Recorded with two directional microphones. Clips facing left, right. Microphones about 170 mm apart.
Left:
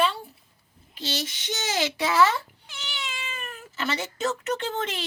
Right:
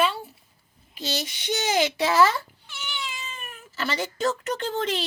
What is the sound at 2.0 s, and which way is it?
Speech, 35° right (ahead or behind).